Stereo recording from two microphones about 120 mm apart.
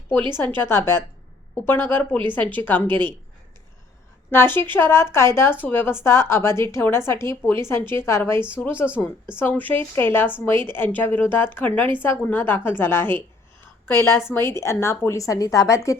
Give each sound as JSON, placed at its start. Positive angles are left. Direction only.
{"t": 0.3, "sound": "a woman's voice", "side_deg": 20}
{"t": 4.3, "sound": "a woman's voice", "side_deg": 20}